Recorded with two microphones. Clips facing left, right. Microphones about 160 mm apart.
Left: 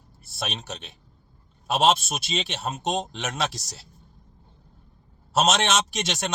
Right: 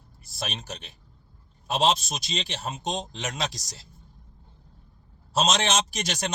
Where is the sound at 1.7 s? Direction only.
75° left (ahead or behind).